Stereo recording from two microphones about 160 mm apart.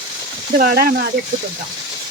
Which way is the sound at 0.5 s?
65° right (ahead or behind).